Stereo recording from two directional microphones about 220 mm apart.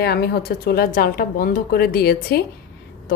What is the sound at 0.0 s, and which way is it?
A woman's voice, 45° left (ahead or behind).